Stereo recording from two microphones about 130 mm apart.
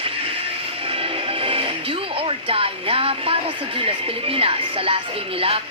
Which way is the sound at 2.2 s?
45° right (ahead or behind).